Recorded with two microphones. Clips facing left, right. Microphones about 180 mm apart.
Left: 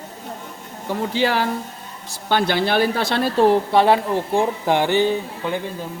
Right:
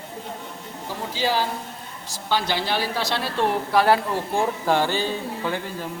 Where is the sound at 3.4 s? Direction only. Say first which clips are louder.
Left 3 dB; 25° left (ahead or behind).